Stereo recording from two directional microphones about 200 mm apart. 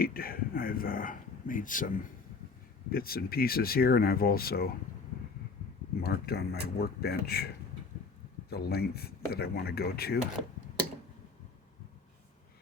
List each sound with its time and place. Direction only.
0.0 s speech: 45° left (ahead or behind)
2.9 s speech: 50° left (ahead or behind)
6.0 s speech: 50° left (ahead or behind)